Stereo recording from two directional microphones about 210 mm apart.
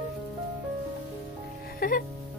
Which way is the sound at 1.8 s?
45° left (ahead or behind).